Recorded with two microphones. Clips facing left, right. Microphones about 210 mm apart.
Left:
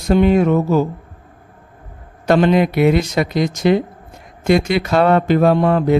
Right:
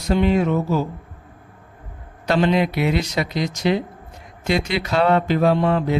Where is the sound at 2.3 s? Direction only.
50° left (ahead or behind).